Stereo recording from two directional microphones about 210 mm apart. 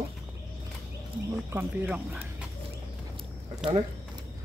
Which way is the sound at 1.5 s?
5° right (ahead or behind).